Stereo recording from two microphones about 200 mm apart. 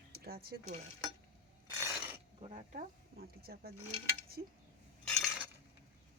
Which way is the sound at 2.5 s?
45° right (ahead or behind).